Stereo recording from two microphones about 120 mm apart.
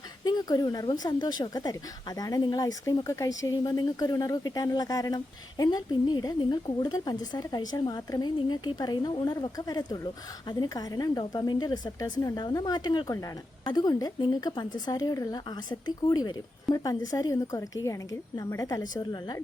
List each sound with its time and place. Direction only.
0.3 s a woman's voice: 35° left (ahead or behind)